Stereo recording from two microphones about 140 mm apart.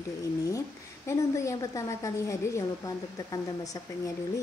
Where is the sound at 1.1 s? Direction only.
20° left (ahead or behind).